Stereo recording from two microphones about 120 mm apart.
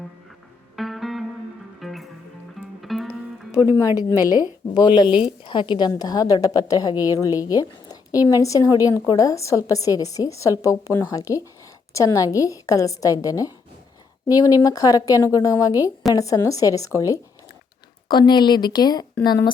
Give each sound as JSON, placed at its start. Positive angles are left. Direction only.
{"t": 0.8, "sound": "music", "side_deg": 0}
{"t": 3.8, "sound": "a woman's voice", "side_deg": 25}
{"t": 18.1, "sound": "a woman's voice", "side_deg": 40}